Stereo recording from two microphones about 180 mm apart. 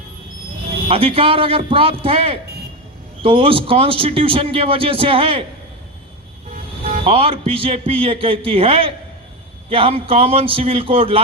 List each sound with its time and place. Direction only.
0.9 s a man's voice: 30° right (ahead or behind)
6.9 s a man's voice: 30° right (ahead or behind)